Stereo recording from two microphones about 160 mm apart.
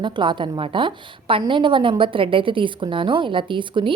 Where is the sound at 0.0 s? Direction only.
30° right (ahead or behind).